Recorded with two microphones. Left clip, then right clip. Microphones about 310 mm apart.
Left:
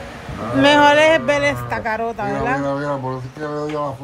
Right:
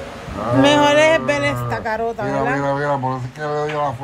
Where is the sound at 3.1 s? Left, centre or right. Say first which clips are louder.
Right 3 dB; right.